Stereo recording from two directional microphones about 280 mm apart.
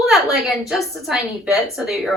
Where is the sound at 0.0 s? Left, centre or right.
Centre.